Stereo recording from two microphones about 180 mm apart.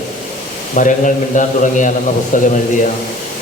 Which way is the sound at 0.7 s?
45° left (ahead or behind).